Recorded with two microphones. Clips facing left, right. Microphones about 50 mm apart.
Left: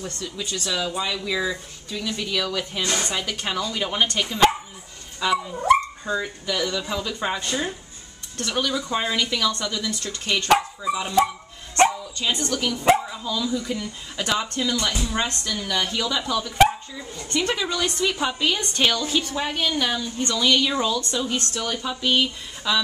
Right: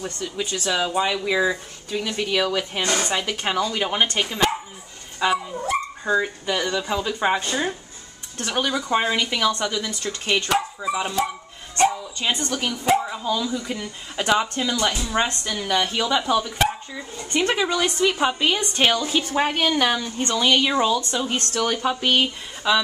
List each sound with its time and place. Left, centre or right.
0.0 s speech: right
3.5 s speech: centre
12.2 s speech: right
19.3 s speech: right
21.4 s speech: right
22.7 s speech: centre